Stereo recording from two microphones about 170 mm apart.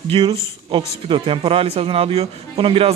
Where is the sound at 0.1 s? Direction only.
30° right (ahead or behind).